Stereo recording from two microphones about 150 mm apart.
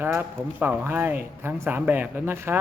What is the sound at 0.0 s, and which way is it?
Speech, 15° right (ahead or behind).